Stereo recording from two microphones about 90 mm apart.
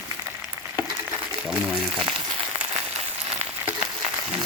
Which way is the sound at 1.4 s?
10° right (ahead or behind).